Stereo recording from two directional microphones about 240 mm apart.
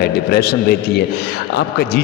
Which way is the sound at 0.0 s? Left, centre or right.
Left.